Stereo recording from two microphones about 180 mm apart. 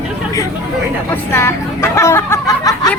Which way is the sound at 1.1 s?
15° left (ahead or behind).